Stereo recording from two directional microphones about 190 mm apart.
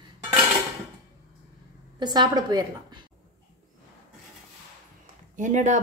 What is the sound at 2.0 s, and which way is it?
A woman's voice, 20° right (ahead or behind).